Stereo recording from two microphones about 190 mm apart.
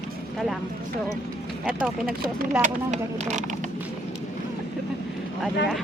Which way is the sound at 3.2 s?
40° right (ahead or behind).